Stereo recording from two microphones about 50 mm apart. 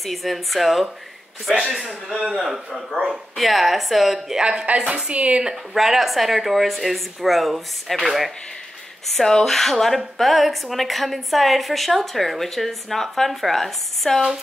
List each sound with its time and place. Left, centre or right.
0.0 s a woman's voice: centre
4.4 s dishes: centre
4.7 s speech: centre
5.8 s a woman's voice: centre